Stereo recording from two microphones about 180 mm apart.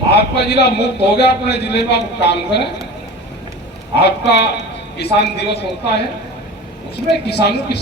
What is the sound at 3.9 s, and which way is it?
A man's voice, 65° left (ahead or behind).